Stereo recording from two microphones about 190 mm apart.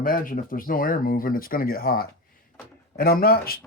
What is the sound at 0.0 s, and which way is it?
Speech, 45° left (ahead or behind).